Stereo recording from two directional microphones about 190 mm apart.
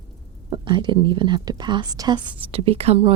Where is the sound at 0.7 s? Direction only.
25° right (ahead or behind).